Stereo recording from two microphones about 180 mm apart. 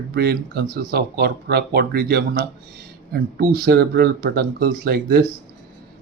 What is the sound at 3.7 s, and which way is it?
Speech, 60° right (ahead or behind).